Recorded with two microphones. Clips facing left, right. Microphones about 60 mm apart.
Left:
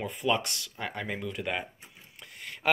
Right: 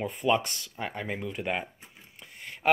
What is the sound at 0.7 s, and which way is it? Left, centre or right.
Speech, right.